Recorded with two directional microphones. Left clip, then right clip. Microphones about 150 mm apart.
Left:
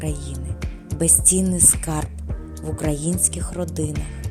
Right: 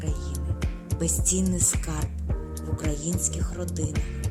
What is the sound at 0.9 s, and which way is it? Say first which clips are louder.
Music: left 8 dB; 40° left (ahead or behind).